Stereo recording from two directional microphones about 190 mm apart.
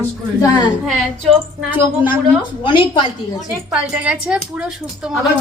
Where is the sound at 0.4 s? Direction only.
20° left (ahead or behind).